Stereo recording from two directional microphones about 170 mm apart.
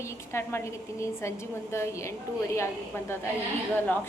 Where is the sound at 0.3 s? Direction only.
15° left (ahead or behind).